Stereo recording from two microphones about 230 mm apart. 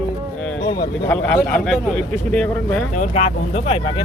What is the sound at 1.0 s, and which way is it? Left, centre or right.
A man's voice, centre.